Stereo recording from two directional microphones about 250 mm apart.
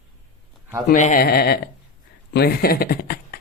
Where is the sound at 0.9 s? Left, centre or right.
Left.